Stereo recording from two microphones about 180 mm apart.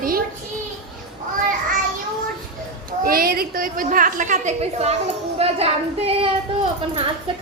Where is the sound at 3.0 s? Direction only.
55° right (ahead or behind).